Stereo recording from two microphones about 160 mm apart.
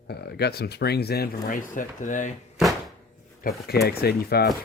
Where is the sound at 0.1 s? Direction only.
90° left; by 2.3 s 55° left (ahead or behind).